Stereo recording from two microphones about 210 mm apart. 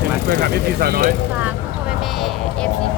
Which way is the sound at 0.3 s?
50° right (ahead or behind).